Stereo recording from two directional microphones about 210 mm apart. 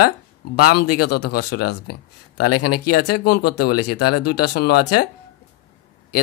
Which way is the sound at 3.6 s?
90° left.